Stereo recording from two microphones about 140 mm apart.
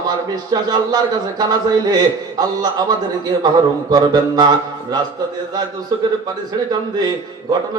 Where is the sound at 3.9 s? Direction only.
30° right (ahead or behind).